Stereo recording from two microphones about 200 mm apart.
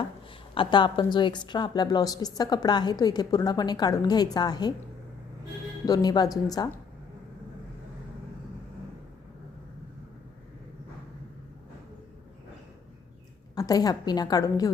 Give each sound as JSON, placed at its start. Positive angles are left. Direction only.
{"t": 0.5, "sound": "a woman's voice", "side_deg": 25}
{"t": 5.8, "sound": "a woman's voice", "side_deg": 20}
{"t": 13.6, "sound": "a woman's voice", "side_deg": 20}